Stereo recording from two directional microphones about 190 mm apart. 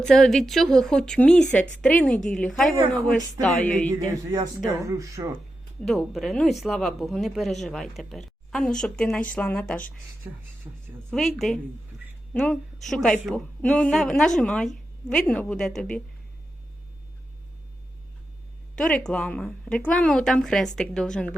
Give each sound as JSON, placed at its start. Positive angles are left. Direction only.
{"t": 0.0, "sound": "speech", "side_deg": 5}
{"t": 4.3, "sound": "speech", "side_deg": -15}
{"t": 5.8, "sound": "speech", "side_deg": 0}
{"t": 10.7, "sound": "a woman's voice", "side_deg": -20}
{"t": 11.1, "sound": "speech", "side_deg": 0}
{"t": 18.8, "sound": "speech", "side_deg": 5}